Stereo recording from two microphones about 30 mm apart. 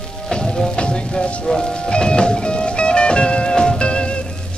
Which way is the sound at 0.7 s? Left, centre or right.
Left.